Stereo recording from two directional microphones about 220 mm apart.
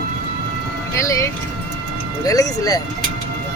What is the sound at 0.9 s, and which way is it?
Speech, 15° left (ahead or behind).